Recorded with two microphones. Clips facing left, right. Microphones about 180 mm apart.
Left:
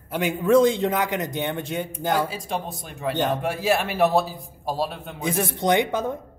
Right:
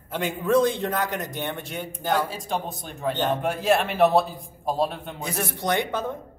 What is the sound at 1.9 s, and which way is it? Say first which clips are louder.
A man's voice: even; 5° left (ahead or behind).